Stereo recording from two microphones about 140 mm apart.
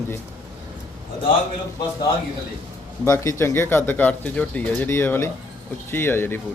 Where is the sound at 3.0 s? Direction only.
20° left (ahead or behind).